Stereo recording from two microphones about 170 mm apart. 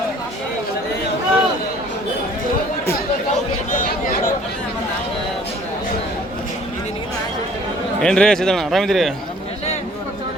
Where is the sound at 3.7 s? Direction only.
55° left (ahead or behind).